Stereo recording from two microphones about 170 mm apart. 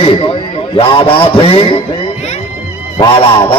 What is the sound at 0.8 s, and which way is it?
A man's voice, 30° left (ahead or behind).